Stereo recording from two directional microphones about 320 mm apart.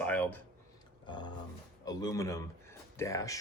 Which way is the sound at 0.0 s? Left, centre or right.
Centre.